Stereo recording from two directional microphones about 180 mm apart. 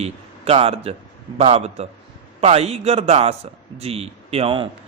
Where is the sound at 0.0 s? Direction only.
35° right (ahead or behind).